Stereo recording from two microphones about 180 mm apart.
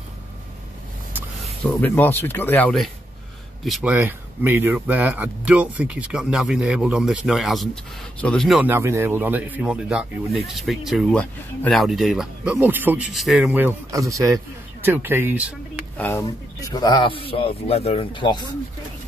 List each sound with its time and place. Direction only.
1.4 s speech: 10° left (ahead or behind)
8.6 s speech: 15° right (ahead or behind)
16.0 s speech: 15° left (ahead or behind)